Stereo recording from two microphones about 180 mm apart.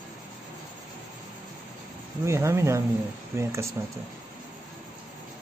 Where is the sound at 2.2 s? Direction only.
15° right (ahead or behind).